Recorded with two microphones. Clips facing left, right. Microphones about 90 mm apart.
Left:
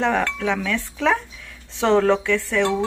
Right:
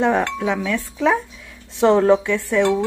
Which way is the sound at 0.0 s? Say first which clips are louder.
Right 2 dB; 15° right (ahead or behind).